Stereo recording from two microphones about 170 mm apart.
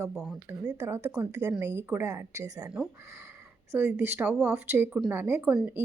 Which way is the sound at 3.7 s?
10° right (ahead or behind).